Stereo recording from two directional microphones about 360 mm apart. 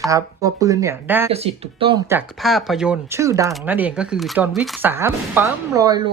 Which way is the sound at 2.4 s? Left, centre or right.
Centre.